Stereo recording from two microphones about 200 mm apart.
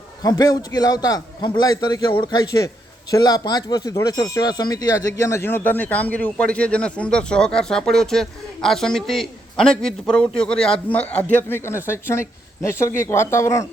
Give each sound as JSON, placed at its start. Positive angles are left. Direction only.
{"t": 0.2, "sound": "a man's voice", "side_deg": 20}